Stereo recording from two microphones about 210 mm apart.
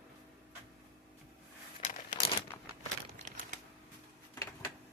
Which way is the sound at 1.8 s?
40° left (ahead or behind).